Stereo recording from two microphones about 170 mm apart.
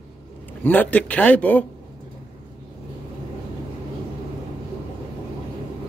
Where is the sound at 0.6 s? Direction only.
10° left (ahead or behind).